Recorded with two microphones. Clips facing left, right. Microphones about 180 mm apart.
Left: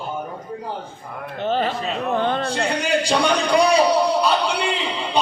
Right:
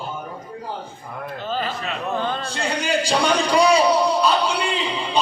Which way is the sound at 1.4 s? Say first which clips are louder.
Left 5 dB; 60° left (ahead or behind).